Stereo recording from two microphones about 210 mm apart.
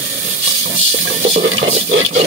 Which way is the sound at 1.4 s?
60° right (ahead or behind).